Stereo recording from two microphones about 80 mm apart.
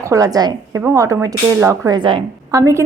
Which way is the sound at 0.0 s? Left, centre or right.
Right.